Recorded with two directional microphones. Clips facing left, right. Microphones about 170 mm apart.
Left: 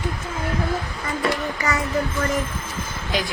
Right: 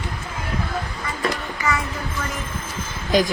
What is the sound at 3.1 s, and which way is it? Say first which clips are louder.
Speech: right 7 dB; 45° right (ahead or behind).